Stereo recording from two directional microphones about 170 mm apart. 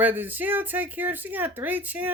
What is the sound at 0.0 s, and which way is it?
Speech, 10° right (ahead or behind).